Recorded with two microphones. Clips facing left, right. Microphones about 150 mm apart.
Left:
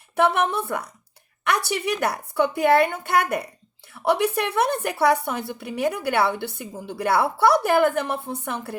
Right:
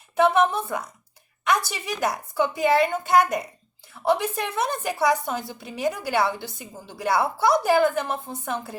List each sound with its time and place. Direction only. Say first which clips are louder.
0.2 s a woman's voice: right 1 dB; 65° left (ahead or behind)